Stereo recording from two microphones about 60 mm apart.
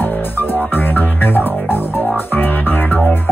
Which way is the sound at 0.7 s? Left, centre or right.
Left.